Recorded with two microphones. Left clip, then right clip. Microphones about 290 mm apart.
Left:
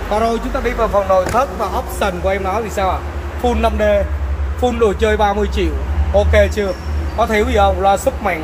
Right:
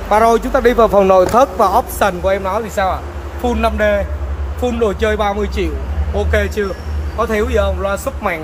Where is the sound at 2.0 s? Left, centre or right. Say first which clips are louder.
Right 3 dB; centre.